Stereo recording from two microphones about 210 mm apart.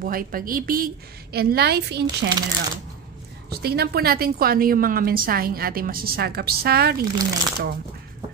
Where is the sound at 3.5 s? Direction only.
50° right (ahead or behind).